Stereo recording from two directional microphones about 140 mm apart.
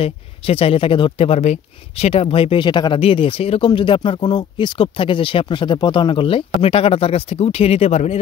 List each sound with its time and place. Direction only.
0.0 s speech: 45° left (ahead or behind)